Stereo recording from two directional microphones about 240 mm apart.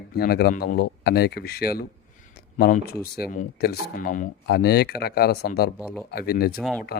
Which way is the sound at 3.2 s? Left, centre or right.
Left.